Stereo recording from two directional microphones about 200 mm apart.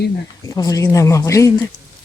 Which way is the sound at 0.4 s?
15° left (ahead or behind).